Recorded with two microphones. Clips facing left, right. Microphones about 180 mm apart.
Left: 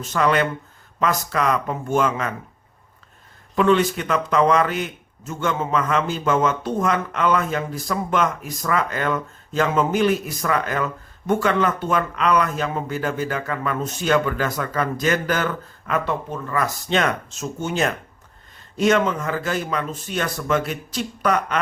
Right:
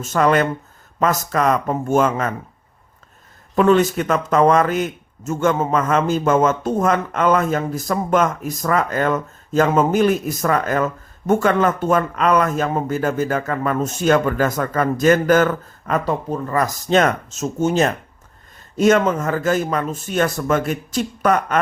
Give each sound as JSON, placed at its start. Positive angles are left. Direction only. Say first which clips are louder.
{"t": 0.0, "sound": "a man's voice", "louder": "right 3 dB", "side_deg": -45}
{"t": 3.5, "sound": "a man's voice", "louder": "right 3 dB", "side_deg": -45}